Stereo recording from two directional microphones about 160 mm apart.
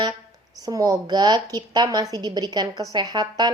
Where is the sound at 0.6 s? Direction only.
20° right (ahead or behind).